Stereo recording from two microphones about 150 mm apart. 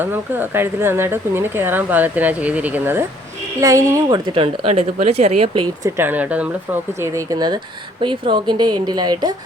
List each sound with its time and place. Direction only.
0.0 s a woman's voice: 15° right (ahead or behind); by 5.6 s 45° right (ahead or behind)
6.0 s speech: 10° right (ahead or behind)
7.0 s speech: 20° right (ahead or behind)